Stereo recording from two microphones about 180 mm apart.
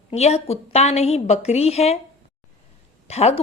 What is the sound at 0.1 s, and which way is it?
A woman's voice, 35° left (ahead or behind).